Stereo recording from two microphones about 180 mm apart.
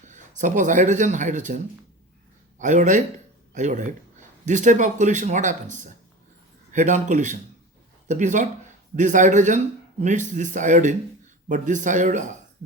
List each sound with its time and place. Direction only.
0.0 s speech: 45° right (ahead or behind)